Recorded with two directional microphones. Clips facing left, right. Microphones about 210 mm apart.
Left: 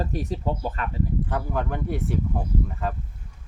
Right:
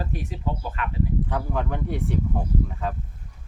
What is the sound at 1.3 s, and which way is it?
Speech, centre (ahead or behind).